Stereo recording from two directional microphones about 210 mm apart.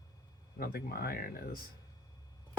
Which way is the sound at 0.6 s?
45° left (ahead or behind).